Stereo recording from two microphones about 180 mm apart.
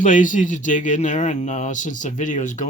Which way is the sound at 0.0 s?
45° left (ahead or behind).